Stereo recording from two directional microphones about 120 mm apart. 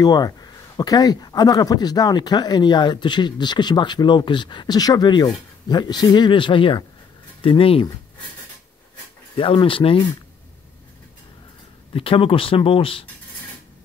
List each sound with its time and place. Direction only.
0.0 s speech: 35° left (ahead or behind); by 7.8 s 50° left (ahead or behind)
9.4 s speech: 45° left (ahead or behind)
11.9 s speech: 50° left (ahead or behind)